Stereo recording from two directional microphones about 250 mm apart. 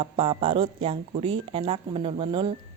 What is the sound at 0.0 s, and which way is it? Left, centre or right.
Speech, right.